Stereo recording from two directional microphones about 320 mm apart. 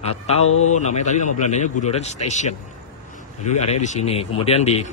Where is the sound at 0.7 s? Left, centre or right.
Left.